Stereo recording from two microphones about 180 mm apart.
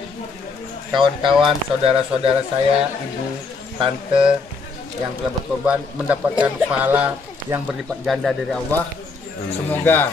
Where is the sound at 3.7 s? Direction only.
30° right (ahead or behind).